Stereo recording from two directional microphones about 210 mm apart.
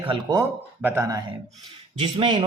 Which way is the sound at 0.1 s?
15° right (ahead or behind).